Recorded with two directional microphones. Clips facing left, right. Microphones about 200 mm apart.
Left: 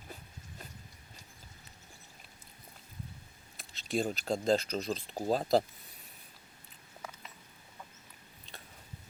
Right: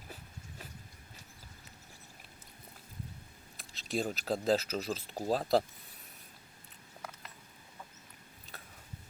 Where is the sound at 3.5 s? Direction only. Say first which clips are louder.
Left 2 dB; centre (ahead or behind).